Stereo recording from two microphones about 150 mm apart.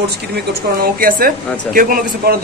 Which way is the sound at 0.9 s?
70° right (ahead or behind).